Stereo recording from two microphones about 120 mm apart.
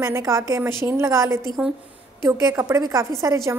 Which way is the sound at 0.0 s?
25° right (ahead or behind).